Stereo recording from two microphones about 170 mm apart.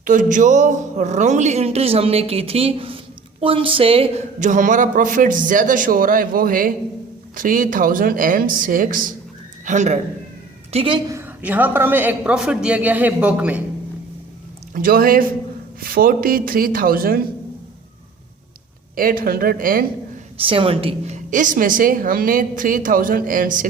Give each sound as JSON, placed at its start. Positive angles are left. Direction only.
{"t": 0.0, "sound": "a woman's voice", "side_deg": -50}
{"t": 10.7, "sound": "speech", "side_deg": -35}
{"t": 11.1, "sound": "a woman's voice", "side_deg": -10}
{"t": 14.7, "sound": "speech", "side_deg": -55}
{"t": 18.9, "sound": "speech", "side_deg": -55}
{"t": 20.4, "sound": "speech", "side_deg": -30}
{"t": 21.2, "sound": "a woman's voice", "side_deg": -50}